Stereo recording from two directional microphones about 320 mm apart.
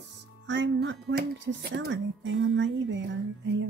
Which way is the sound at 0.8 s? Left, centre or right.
Right.